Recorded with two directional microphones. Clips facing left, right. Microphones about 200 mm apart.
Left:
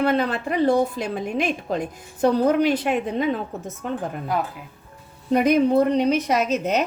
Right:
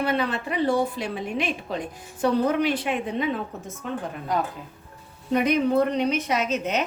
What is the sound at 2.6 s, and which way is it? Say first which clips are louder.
Speech: left 4 dB; 45° left (ahead or behind).